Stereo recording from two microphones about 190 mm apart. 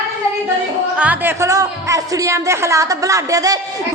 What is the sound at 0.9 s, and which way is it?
A woman's voice, 10° right (ahead or behind).